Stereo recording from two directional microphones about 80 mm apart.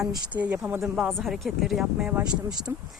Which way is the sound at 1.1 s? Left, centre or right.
Centre.